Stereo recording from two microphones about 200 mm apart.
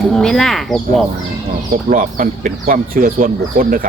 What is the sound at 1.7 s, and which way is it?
Speech, 45° right (ahead or behind).